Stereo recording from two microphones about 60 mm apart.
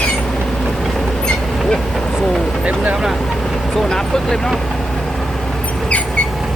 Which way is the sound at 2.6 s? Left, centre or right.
Right.